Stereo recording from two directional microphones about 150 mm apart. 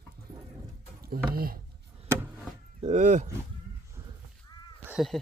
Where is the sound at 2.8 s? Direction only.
50° right (ahead or behind).